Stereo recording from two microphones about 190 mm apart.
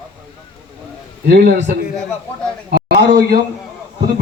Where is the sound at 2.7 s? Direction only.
60° right (ahead or behind).